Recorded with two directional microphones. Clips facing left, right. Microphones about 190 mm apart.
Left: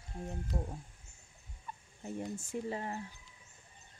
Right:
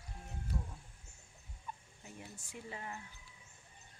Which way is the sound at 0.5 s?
45° left (ahead or behind).